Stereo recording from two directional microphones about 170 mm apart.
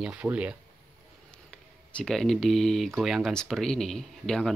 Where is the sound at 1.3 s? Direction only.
5° left (ahead or behind).